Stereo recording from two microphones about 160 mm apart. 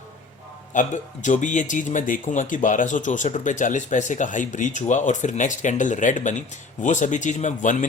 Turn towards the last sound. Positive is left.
turn(degrees=50)  # may be behind; listen again after turning